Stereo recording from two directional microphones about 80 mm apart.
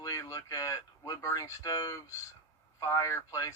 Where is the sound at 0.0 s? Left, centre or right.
Left.